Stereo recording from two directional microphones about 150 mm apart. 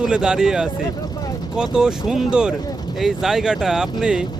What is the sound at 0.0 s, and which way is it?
Speech, 5° right (ahead or behind).